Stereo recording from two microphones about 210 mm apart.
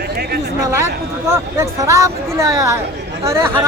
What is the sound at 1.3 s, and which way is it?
Speech, 15° right (ahead or behind).